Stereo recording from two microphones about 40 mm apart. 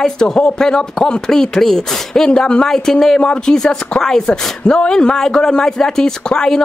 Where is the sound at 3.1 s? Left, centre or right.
Left.